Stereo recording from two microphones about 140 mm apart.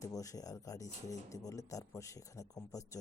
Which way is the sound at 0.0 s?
25° left (ahead or behind).